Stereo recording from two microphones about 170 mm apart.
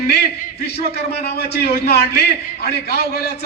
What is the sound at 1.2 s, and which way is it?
Speech, 70° left (ahead or behind).